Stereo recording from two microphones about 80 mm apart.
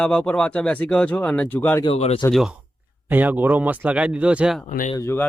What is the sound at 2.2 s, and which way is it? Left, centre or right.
Speech, left.